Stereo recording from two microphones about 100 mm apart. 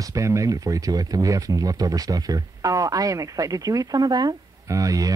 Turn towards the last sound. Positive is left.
turn(degrees=-35)  # may be behind; listen again after turning